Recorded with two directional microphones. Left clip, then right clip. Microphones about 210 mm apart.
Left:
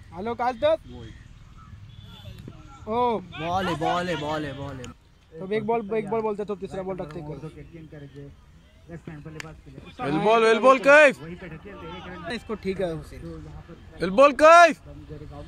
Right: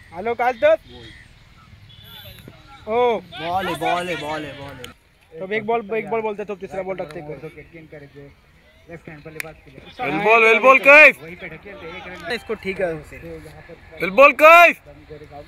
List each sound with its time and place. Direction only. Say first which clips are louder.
0.1 s speech: right 6 dB; 30° right (ahead or behind)
2.9 s speech: right 6 dB; 20° right (ahead or behind)
3.3 s speech: right 3 dB; 25° left (ahead or behind)
3.8 s a man's voice: right 3 dB; 5° left (ahead or behind)
5.4 s speech: right 4 dB; 25° right (ahead or behind)
8.9 s a man's voice: right 7 dB; 10° left (ahead or behind)
10.2 s speech: right 5 dB; centre (ahead or behind)
11.1 s a man's voice: right 6 dB; 10° left (ahead or behind)
12.3 s speech: right 5 dB; 35° right (ahead or behind)
13.9 s speech: right 5 dB; centre (ahead or behind)